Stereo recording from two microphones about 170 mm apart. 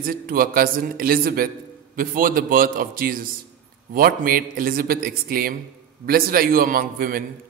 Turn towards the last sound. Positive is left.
turn(degrees=-60)  # may be behind; listen again after turning